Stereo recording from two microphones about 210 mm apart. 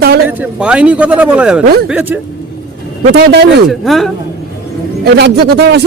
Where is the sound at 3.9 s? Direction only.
Centre (ahead or behind).